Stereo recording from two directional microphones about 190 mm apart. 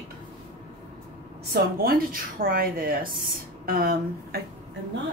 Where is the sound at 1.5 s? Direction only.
50° right (ahead or behind).